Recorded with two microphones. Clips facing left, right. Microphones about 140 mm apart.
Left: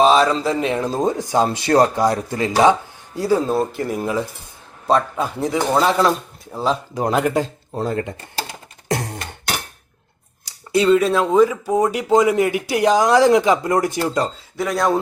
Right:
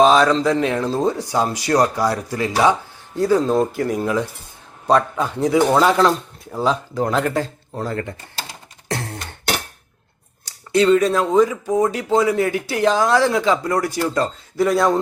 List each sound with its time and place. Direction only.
0.0 s speech: centre (ahead or behind)
0.8 s speech: 15° left (ahead or behind)
3.2 s speech: 5° left (ahead or behind)
6.9 s speech: 15° left (ahead or behind)
8.9 s a sound: 15° left (ahead or behind)
10.4 s speech: 10° left (ahead or behind)
14.5 s speech: centre (ahead or behind)